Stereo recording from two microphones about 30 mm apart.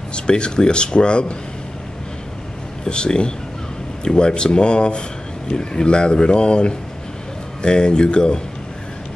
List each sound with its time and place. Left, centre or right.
0.1 s speech: left
2.8 s speech: left